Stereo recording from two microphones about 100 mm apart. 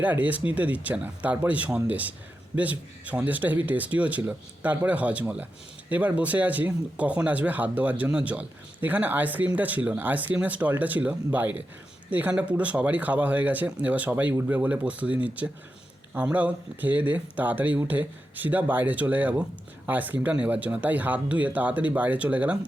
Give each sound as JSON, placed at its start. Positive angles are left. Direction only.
{"t": 0.0, "sound": "speech", "side_deg": -15}